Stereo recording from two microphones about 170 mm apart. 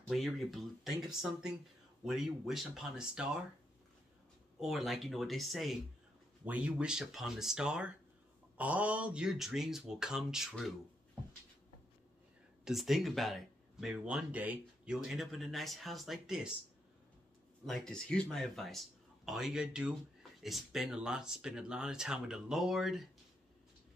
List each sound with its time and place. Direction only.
0.1 s speech: centre (ahead or behind)
2.0 s speech: centre (ahead or behind)
4.6 s speech: centre (ahead or behind)
12.6 s speech: centre (ahead or behind)
17.6 s speech: 5° left (ahead or behind)